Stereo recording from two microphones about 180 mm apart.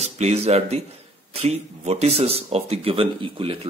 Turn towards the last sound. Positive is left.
turn(degrees=-30)  # may be behind; listen again after turning